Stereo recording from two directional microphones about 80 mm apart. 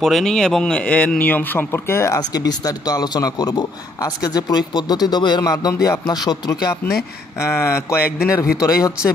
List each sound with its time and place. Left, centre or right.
0.0 s speech: centre; by 2.1 s left
2.1 s speech: left
5.4 s speech: left
6.8 s speech: left
7.3 s a man's voice: left